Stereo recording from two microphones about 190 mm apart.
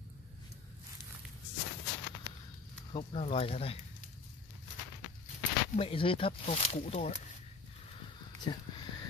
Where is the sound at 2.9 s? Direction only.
30° left (ahead or behind).